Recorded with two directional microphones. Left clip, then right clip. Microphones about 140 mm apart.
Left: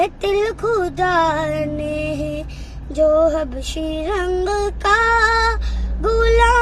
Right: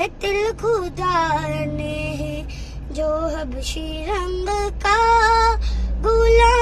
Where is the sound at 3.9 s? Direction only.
15° right (ahead or behind).